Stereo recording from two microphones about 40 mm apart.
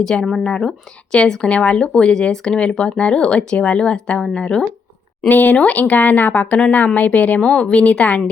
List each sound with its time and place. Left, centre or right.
0.0 s speech: centre
5.3 s a woman's voice: left
7.4 s speech: left